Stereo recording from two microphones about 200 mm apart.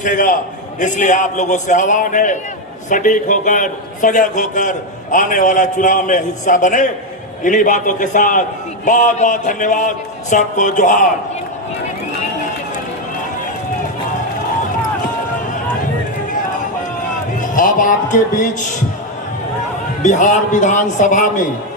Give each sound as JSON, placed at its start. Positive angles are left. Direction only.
{"t": 0.0, "sound": "a man's voice", "side_deg": 40}
{"t": 17.4, "sound": "music", "side_deg": 40}
{"t": 20.0, "sound": "a man's voice", "side_deg": 40}